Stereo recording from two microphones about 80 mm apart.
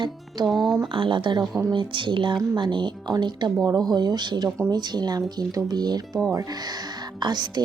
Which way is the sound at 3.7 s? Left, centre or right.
Right.